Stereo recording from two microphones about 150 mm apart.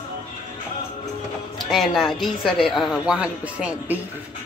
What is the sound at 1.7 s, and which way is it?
Speech, centre (ahead or behind).